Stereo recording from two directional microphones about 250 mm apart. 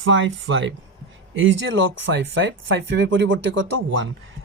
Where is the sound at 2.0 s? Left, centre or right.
Right.